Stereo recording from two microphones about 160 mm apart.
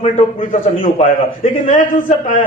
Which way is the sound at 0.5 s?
55° left (ahead or behind).